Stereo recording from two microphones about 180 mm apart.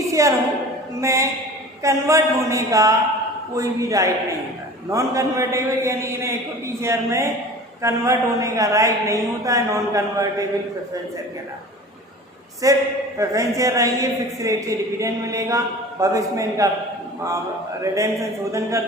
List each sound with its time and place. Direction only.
0.1 s a woman's voice: 15° right (ahead or behind)
12.6 s a woman's voice: 20° right (ahead or behind)
17.9 s a woman's voice: 15° right (ahead or behind)